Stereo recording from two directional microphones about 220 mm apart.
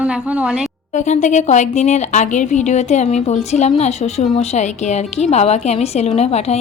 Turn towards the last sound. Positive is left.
turn(degrees=30)  # may be behind; listen again after turning